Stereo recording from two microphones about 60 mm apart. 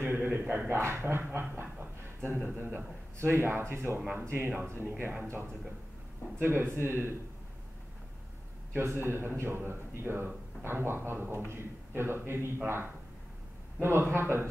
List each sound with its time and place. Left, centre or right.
0.0 s a sound: right
0.7 s a man's voice: right
6.3 s a man's voice: right
8.7 s a man's voice: right